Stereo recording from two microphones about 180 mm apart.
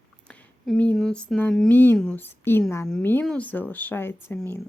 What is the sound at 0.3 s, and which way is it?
Speech, 5° left (ahead or behind).